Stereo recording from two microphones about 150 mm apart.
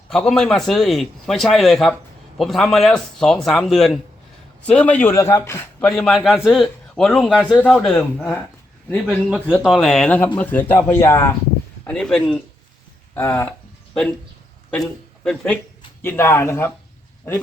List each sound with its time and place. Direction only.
0.1 s a man's voice: 5° left (ahead or behind)
5.9 s a man's voice: centre (ahead or behind)
9.3 s a man's voice: 5° right (ahead or behind); by 11.3 s 20° left (ahead or behind)
11.9 s a man's voice: 5° left (ahead or behind)
13.1 s speech: 15° left (ahead or behind)
14.7 s a man's voice: 5° left (ahead or behind)
16.0 s speech: 15° left (ahead or behind)